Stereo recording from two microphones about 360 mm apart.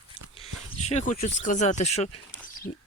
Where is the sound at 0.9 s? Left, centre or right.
Centre.